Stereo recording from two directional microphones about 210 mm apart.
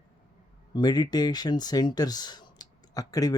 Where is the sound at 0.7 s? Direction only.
20° left (ahead or behind).